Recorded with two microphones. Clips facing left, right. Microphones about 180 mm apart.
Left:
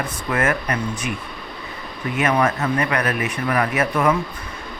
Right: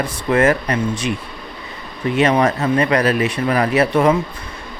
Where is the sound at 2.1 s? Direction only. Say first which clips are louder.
Right 4 dB; 30° right (ahead or behind).